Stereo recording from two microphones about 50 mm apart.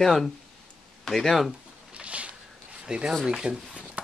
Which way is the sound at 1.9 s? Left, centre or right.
Right.